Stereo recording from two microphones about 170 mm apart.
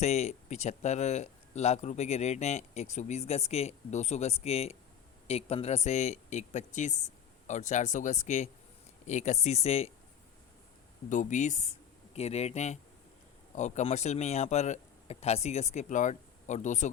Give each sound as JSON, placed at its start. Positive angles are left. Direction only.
{"t": 0.0, "sound": "speech", "side_deg": 40}
{"t": 11.1, "sound": "speech", "side_deg": 45}